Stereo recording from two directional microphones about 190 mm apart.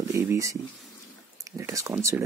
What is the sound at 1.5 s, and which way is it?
Speech, 15° right (ahead or behind).